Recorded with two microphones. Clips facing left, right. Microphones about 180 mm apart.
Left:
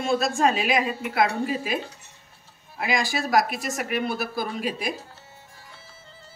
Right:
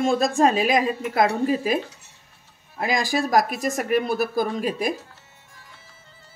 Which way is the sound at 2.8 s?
45° right (ahead or behind).